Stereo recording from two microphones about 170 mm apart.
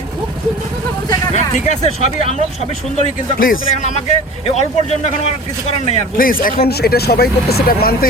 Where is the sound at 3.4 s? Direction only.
50° left (ahead or behind).